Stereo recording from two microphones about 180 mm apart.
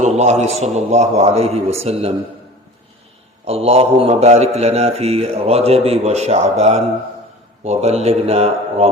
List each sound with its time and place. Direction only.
0.0 s a man's voice: 40° right (ahead or behind)
3.4 s a man's voice: 35° right (ahead or behind)